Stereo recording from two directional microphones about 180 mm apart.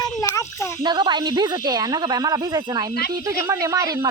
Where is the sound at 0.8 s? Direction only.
25° right (ahead or behind).